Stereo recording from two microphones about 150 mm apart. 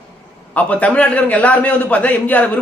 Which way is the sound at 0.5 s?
10° left (ahead or behind).